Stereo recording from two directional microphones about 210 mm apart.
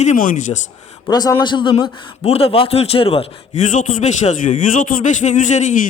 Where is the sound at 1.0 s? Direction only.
20° left (ahead or behind).